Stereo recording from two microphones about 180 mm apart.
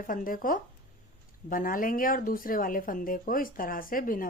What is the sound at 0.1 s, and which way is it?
Speech, 50° left (ahead or behind).